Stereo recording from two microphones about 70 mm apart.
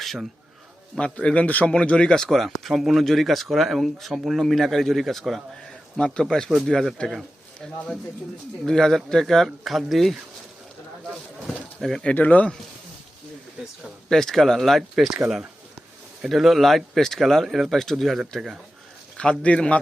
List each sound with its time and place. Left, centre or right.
0.0 s a sound: centre
0.9 s a man's voice: centre
11.8 s a man's voice: centre
12.0 s speech: left
14.1 s a man's voice: centre
16.2 s a man's voice: centre
19.1 s a man's voice: centre